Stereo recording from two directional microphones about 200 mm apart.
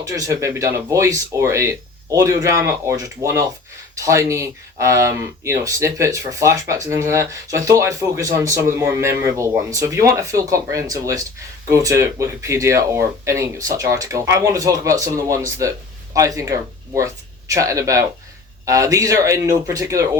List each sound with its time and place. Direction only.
0.0 s speech: 15° right (ahead or behind)